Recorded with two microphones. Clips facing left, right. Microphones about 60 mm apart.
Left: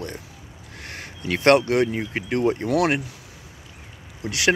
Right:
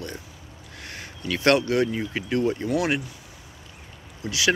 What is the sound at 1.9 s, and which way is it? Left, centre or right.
Speech, left.